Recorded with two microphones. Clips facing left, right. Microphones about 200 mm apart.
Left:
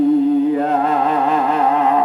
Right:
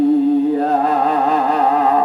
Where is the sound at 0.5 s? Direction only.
35° right (ahead or behind).